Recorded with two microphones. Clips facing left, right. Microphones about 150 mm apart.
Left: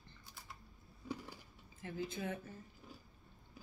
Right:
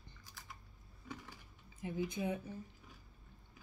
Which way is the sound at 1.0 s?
30° left (ahead or behind).